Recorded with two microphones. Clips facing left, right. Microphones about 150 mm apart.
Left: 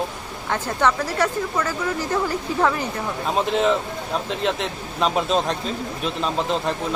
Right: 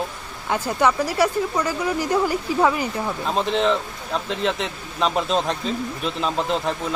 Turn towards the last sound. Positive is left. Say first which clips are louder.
# even
turn(degrees=0)  # may be behind; listen again after turning